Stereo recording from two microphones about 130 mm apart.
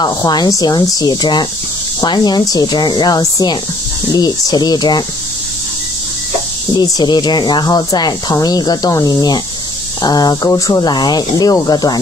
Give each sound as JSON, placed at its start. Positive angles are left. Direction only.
{"t": 0.0, "sound": "speech", "side_deg": 30}
{"t": 6.7, "sound": "speech", "side_deg": 35}